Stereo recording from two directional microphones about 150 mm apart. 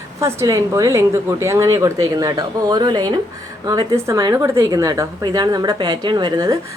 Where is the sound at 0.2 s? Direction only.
20° right (ahead or behind).